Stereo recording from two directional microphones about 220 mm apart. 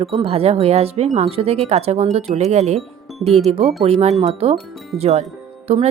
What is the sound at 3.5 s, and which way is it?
Speech, 25° right (ahead or behind).